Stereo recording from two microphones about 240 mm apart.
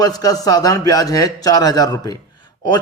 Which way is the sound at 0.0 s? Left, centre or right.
Centre.